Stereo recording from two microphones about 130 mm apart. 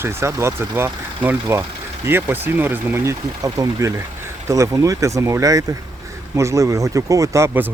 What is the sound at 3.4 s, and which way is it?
Speech, 25° right (ahead or behind).